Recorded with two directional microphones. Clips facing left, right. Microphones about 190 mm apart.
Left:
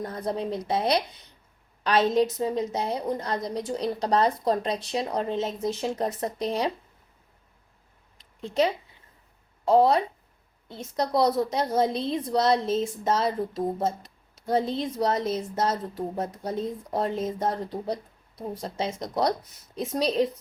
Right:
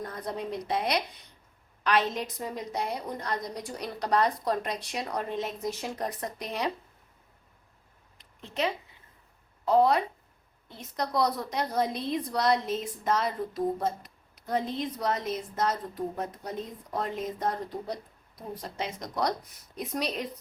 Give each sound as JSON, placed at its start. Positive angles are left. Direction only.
{"t": 0.0, "sound": "a woman's voice", "side_deg": 30}
{"t": 8.2, "sound": "a sound", "side_deg": 35}
{"t": 9.6, "sound": "a woman's voice", "side_deg": 30}